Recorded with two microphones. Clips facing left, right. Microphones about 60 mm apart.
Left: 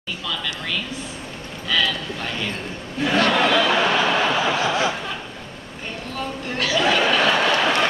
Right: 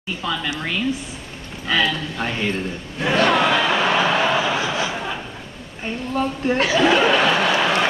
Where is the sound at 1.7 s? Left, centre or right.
Right.